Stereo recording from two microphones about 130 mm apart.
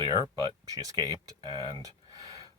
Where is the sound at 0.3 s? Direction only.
30° right (ahead or behind).